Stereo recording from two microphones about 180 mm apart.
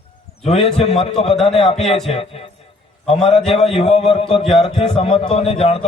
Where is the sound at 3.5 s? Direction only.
35° left (ahead or behind).